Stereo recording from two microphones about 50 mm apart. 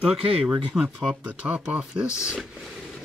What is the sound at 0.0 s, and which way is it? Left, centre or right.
Speech, centre.